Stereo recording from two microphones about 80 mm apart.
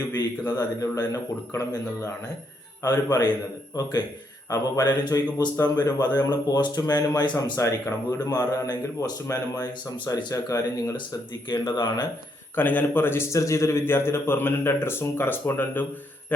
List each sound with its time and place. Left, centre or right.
0.5 s speech: left
4.4 s speech: left
9.3 s speech: left
10.2 s speech: left
11.4 s speech: left
12.5 s a man's voice: left
13.3 s a man's voice: left